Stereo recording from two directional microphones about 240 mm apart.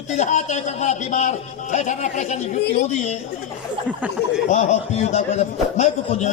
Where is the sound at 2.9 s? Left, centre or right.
Left.